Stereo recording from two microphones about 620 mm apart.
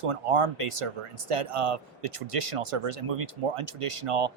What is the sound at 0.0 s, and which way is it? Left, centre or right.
Speech, right.